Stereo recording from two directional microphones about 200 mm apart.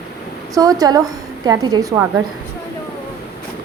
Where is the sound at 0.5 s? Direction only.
20° right (ahead or behind).